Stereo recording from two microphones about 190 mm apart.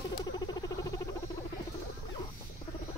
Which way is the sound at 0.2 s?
20° left (ahead or behind).